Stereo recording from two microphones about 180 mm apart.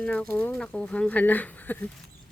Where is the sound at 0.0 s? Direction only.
5° left (ahead or behind).